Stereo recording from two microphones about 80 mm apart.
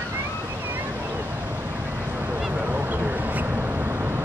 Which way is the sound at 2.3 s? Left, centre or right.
Centre.